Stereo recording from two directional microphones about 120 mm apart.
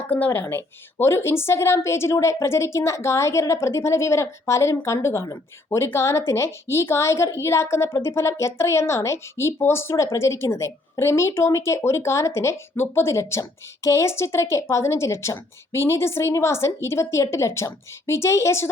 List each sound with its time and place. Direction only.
0.1 s a woman's voice: 15° left (ahead or behind)